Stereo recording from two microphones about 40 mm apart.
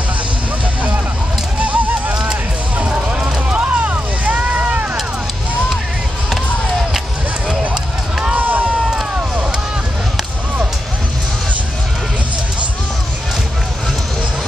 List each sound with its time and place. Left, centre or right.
1.6 s music: right
2.8 s basketball bounce: right
3.4 s run: right
6.3 s basketball bounce: centre
7.7 s a sound: centre
8.4 s run: right